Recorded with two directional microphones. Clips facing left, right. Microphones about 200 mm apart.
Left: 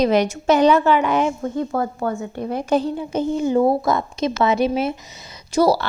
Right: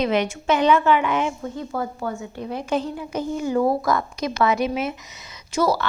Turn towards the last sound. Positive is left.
turn(degrees=35)  # may be behind; listen again after turning